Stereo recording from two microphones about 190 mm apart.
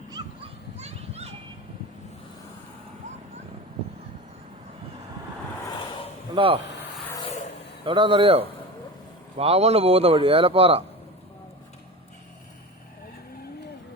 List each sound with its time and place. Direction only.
0.2 s a sound: 25° right (ahead or behind)
0.8 s children playing: 35° right (ahead or behind)
6.3 s speech: 30° right (ahead or behind)
7.9 s speech: 25° right (ahead or behind)